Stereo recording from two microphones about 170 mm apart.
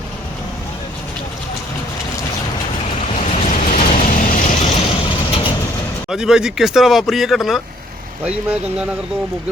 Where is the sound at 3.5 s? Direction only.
50° left (ahead or behind).